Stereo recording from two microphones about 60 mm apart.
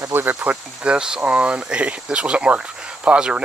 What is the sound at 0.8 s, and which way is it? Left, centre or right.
Speech, centre.